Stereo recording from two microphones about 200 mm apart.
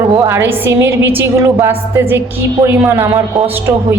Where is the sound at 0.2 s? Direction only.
10° right (ahead or behind).